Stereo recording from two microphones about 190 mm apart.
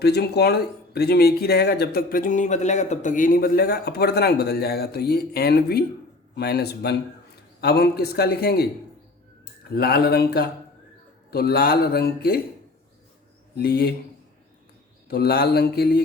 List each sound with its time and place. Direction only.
0.0 s speech: 60° left (ahead or behind)
13.6 s speech: 60° left (ahead or behind)
15.0 s speech: 55° left (ahead or behind)